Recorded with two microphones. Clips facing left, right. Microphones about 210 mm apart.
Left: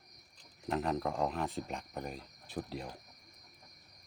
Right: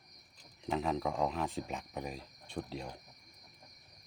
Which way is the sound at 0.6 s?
Centre (ahead or behind).